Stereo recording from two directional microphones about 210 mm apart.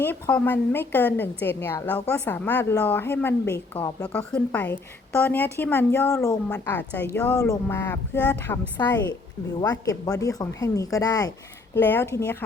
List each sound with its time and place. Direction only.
0.0 s a woman's voice: 10° left (ahead or behind)